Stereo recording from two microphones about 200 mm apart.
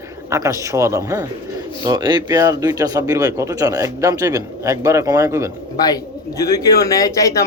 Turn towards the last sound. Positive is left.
turn(degrees=15)  # may be behind; listen again after turning